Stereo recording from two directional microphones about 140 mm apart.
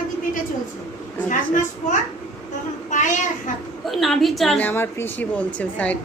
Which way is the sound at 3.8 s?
Centre (ahead or behind).